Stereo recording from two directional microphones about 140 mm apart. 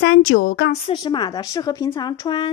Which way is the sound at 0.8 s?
35° left (ahead or behind).